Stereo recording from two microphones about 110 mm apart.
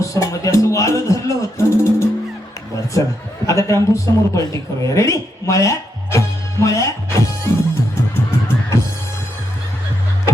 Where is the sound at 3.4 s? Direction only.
30° left (ahead or behind).